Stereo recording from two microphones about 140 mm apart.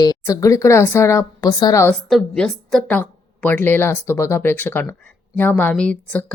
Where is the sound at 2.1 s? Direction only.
Centre (ahead or behind).